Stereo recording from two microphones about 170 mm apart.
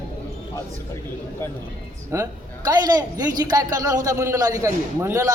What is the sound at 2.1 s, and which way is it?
A man's voice, 15° right (ahead or behind).